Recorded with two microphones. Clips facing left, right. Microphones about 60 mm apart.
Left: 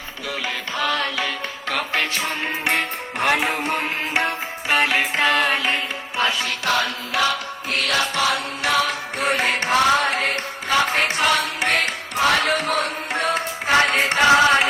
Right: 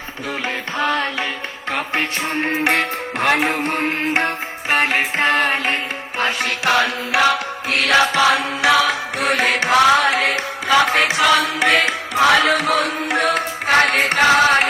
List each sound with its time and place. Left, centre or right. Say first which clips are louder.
0.8 s music: right 3 dB; right
2.4 s music: right 7 dB; right
6.4 s music: right 4 dB; right